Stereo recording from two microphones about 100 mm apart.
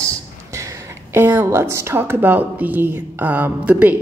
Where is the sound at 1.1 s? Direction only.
20° right (ahead or behind).